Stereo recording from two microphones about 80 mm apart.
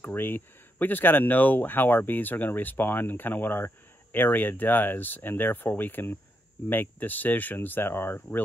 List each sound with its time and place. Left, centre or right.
0.0 s speech: left